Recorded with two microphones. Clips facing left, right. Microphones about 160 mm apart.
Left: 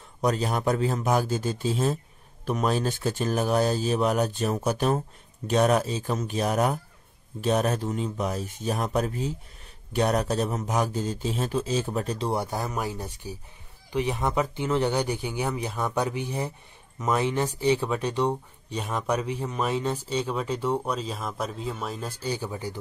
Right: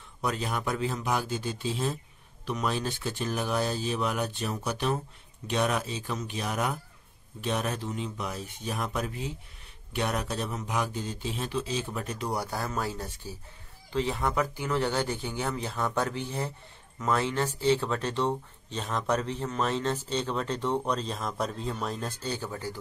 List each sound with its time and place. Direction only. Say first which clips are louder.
0.2 s speech: left 6 dB; 40° left (ahead or behind); by 22.8 s 15° left (ahead or behind)